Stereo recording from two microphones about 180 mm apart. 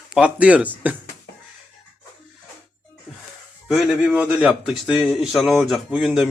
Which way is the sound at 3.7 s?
Centre (ahead or behind).